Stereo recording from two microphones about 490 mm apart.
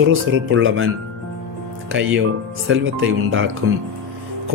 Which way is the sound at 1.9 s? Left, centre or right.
Right.